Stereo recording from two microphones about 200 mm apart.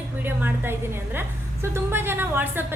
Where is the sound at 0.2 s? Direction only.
10° right (ahead or behind).